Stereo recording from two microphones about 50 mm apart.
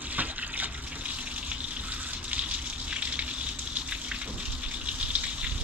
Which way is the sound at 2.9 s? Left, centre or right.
Right.